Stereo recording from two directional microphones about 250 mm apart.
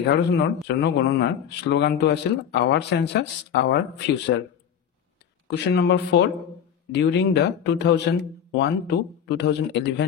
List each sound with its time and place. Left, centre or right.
0.0 s speech: left
5.5 s speech: left